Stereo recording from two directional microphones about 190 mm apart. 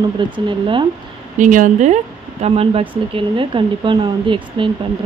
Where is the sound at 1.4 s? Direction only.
45° right (ahead or behind).